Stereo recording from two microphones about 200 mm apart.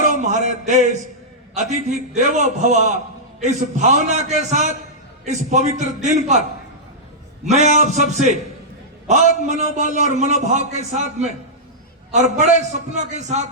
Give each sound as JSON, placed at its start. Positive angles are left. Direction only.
{"t": 0.1, "sound": "a sound", "side_deg": -35}
{"t": 1.5, "sound": "a man's voice", "side_deg": -35}
{"t": 7.4, "sound": "a man's voice", "side_deg": -35}
{"t": 9.5, "sound": "a man's voice", "side_deg": -35}